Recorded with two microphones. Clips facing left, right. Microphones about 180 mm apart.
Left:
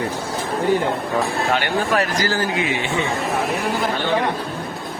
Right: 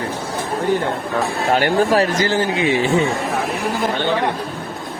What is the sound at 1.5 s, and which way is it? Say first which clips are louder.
Speech: right 7 dB; 40° right (ahead or behind).